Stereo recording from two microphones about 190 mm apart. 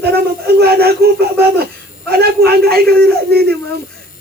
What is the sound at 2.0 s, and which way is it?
A man's voice, 55° right (ahead or behind).